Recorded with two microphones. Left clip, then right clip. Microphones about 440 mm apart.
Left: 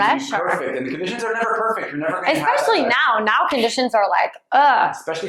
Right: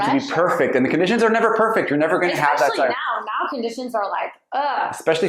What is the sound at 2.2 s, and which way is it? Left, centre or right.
A woman's voice, left.